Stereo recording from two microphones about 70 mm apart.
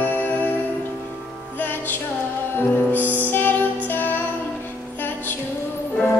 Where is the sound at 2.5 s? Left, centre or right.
Left.